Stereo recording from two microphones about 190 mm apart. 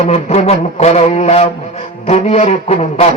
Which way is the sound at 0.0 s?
35° left (ahead or behind).